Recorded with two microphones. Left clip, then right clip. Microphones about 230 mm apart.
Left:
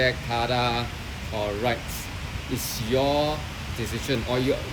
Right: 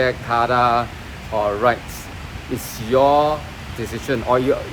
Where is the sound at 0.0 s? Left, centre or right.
Right.